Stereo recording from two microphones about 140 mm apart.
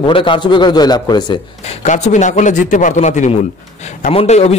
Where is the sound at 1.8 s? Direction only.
60° left (ahead or behind).